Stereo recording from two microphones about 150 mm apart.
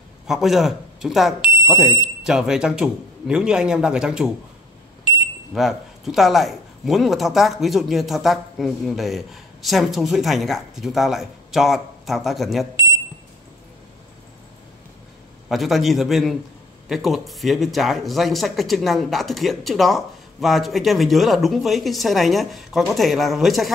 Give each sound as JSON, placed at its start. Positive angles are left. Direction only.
{"t": 0.3, "sound": "speech", "side_deg": 0}
{"t": 15.4, "sound": "speech", "side_deg": 0}